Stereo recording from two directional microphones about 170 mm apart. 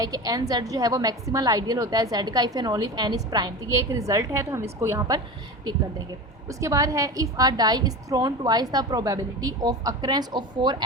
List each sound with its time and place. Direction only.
0.0 s a woman's voice: 20° right (ahead or behind)
6.5 s a woman's voice: 20° right (ahead or behind)